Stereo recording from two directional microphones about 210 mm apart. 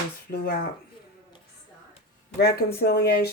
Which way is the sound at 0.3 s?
45° left (ahead or behind).